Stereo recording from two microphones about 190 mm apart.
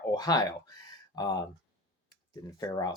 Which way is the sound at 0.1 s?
20° left (ahead or behind).